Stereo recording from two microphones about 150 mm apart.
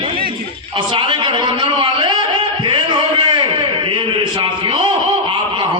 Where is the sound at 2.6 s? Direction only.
30° right (ahead or behind).